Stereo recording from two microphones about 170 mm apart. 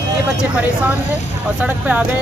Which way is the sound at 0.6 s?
10° right (ahead or behind).